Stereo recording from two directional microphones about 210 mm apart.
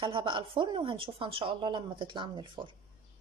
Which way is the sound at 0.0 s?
25° right (ahead or behind).